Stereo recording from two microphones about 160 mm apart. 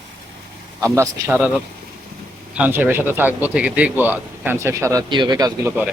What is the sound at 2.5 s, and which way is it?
Speech, 10° right (ahead or behind).